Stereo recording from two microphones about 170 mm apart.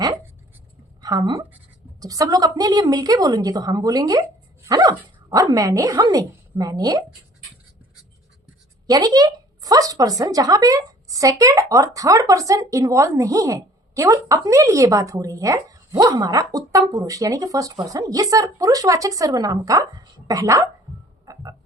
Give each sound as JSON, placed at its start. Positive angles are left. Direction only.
{"t": 1.0, "sound": "speech", "side_deg": -25}
{"t": 8.9, "sound": "speech", "side_deg": -20}
{"t": 21.3, "sound": "music", "side_deg": -20}